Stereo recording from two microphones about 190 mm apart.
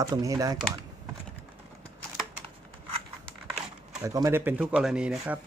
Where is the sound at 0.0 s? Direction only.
15° right (ahead or behind).